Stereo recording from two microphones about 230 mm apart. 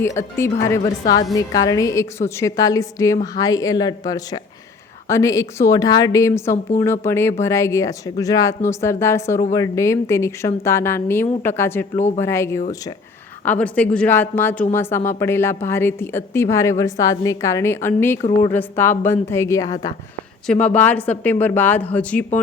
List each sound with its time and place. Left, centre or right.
0.2 s a woman's voice: centre
11.9 s speech: left
12.2 s a woman's voice: centre